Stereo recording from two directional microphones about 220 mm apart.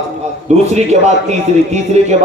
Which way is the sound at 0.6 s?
30° right (ahead or behind).